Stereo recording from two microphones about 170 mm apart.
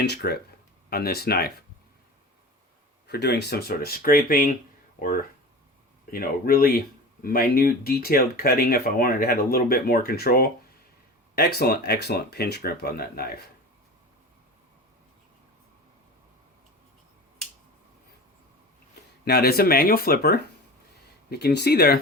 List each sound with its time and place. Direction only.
0.0 s speech: 75° left (ahead or behind)
3.1 s speech: 75° left (ahead or behind)
19.2 s speech: 65° left (ahead or behind)